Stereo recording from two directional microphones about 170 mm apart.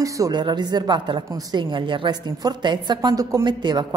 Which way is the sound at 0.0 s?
20° right (ahead or behind).